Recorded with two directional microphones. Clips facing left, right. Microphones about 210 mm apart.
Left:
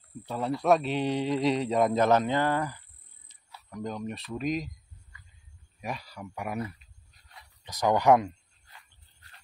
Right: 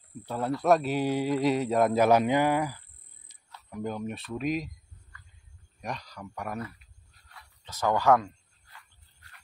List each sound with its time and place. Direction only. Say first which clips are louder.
0.2 s speech: right 1 dB; centre (ahead or behind)
5.8 s speech: left 1 dB; 5° left (ahead or behind)
7.2 s a sound: left 1 dB; 15° left (ahead or behind)